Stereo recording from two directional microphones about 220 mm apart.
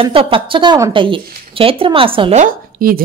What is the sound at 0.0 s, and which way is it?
A woman's voice, 25° right (ahead or behind).